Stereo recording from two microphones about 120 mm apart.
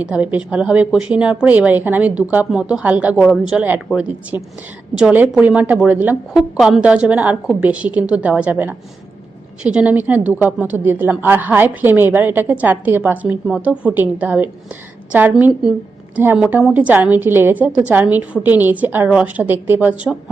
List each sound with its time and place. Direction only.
0.0 s a woman's voice: 10° right (ahead or behind)
4.9 s a woman's voice: 10° right (ahead or behind)
6.6 s a woman's voice: 5° right (ahead or behind)